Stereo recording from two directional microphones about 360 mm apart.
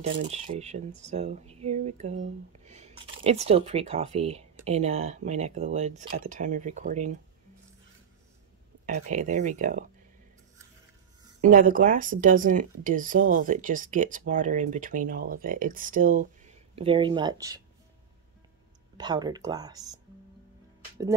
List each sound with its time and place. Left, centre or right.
0.3 s speech: centre
9.1 s speech: centre
11.4 s speech: right
18.9 s speech: centre